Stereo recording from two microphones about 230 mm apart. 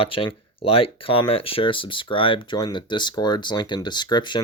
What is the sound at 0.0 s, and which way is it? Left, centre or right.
Speech, left.